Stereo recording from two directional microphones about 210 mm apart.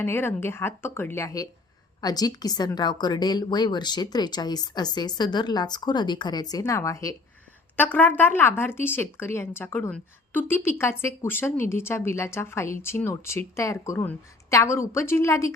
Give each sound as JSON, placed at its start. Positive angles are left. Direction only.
{"t": 0.0, "sound": "a woman's voice", "side_deg": 10}